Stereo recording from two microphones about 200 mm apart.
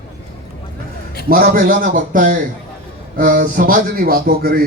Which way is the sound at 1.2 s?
40° right (ahead or behind).